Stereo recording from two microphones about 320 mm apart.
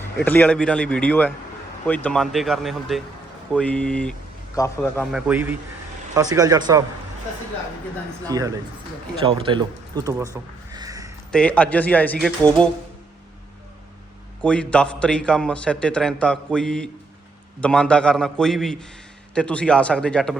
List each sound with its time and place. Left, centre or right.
0.3 s a man's voice: centre
8.3 s speech: centre
10.8 s a sound: centre
11.3 s a man's voice: centre
14.4 s a man's voice: centre